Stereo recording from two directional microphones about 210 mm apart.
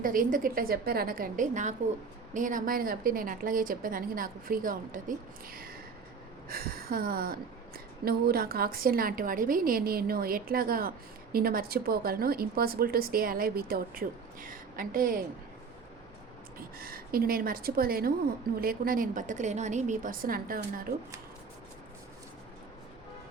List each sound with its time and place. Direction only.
0.0 s a woman's voice: 40° right (ahead or behind)
16.6 s a woman's voice: 45° right (ahead or behind)